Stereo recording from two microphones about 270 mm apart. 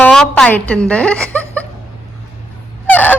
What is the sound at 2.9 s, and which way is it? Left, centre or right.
Fowl, centre.